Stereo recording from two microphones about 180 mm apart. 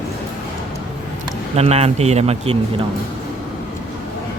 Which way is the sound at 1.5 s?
35° right (ahead or behind).